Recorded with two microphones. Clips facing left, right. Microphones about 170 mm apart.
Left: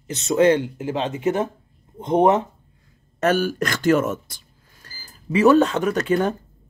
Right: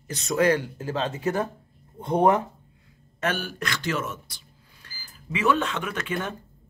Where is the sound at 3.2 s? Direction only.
40° left (ahead or behind).